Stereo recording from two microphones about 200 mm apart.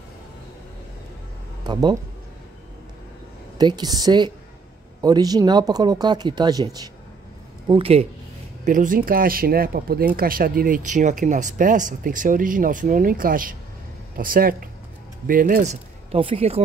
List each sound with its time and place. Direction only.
1.6 s speech: 20° right (ahead or behind)
3.5 s speech: 20° right (ahead or behind)
8.6 s speech: 40° right (ahead or behind)